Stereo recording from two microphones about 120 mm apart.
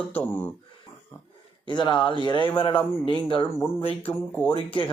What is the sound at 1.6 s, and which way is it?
Speech, 40° left (ahead or behind).